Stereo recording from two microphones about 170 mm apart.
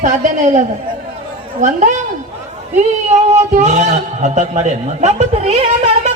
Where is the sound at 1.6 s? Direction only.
45° right (ahead or behind).